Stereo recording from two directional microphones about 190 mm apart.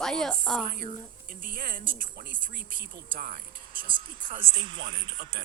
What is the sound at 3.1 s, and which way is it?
Speech, 45° right (ahead or behind).